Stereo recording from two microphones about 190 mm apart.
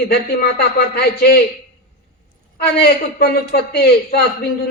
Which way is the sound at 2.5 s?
55° left (ahead or behind).